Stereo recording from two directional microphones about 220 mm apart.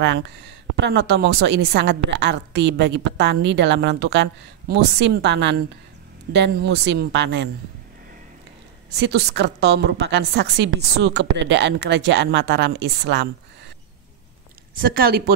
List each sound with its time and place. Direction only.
0.0 s a woman's voice: 55° right (ahead or behind)
8.9 s a woman's voice: 50° right (ahead or behind)
14.8 s a woman's voice: 40° right (ahead or behind)